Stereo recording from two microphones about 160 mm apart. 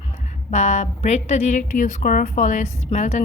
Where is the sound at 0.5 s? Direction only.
45° left (ahead or behind).